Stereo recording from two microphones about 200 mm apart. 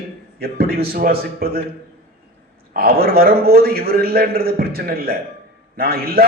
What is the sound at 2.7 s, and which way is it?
A man's voice, 50° right (ahead or behind).